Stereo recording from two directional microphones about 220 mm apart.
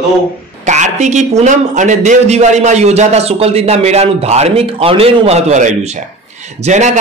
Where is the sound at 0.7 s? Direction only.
35° right (ahead or behind).